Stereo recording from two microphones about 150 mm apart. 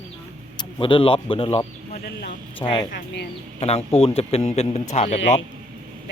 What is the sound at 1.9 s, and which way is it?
Speech, 90° left.